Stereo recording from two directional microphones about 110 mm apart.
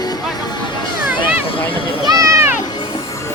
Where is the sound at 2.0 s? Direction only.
35° right (ahead or behind).